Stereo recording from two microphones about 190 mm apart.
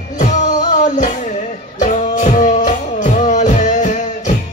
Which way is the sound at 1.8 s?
40° left (ahead or behind).